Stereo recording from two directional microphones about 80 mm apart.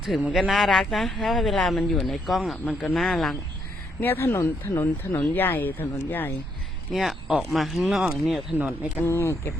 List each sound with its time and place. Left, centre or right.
0.0 s speech: centre
4.0 s speech: left
6.9 s speech: centre
9.0 s speech: left